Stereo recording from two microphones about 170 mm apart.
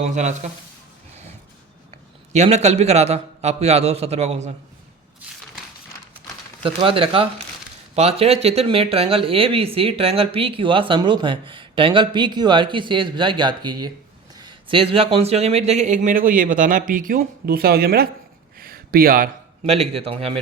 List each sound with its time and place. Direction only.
0.0 s speech: 45° right (ahead or behind)
2.3 s speech: 40° right (ahead or behind)
6.6 s speech: 30° right (ahead or behind); by 18.1 s 65° right (ahead or behind)
18.5 s a sound: 60° right (ahead or behind)
19.6 s speech: 35° right (ahead or behind)